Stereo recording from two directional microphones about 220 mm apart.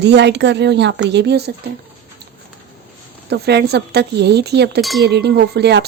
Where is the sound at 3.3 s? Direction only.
50° right (ahead or behind).